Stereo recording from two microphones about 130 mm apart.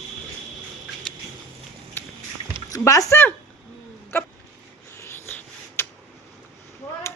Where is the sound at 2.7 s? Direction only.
25° left (ahead or behind).